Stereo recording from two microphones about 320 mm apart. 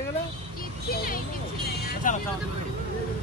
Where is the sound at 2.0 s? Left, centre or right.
Left.